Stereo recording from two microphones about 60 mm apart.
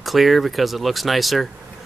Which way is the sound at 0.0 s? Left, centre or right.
Centre.